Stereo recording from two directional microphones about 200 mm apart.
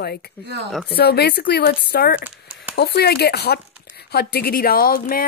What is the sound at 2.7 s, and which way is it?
Speech, 55° left (ahead or behind).